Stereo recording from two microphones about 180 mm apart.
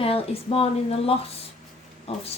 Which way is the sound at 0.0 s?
30° left (ahead or behind).